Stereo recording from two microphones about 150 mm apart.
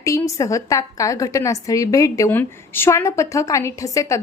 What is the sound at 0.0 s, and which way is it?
A woman's voice, 20° left (ahead or behind).